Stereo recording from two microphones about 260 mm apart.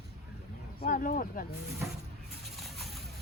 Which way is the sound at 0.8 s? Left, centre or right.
Left.